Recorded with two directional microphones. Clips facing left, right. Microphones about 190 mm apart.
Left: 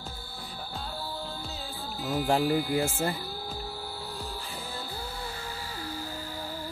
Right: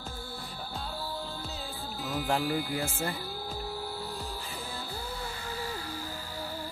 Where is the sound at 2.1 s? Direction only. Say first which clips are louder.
Left 4 dB; 40° left (ahead or behind).